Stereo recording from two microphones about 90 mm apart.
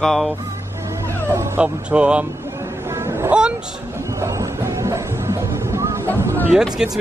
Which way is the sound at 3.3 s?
10° right (ahead or behind).